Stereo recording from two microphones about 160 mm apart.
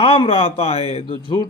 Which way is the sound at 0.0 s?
35° left (ahead or behind).